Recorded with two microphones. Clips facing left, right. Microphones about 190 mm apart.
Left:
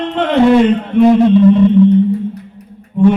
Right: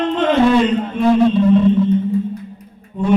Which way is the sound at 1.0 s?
65° left (ahead or behind).